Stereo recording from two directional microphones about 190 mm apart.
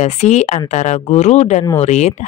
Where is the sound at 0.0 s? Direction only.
35° left (ahead or behind).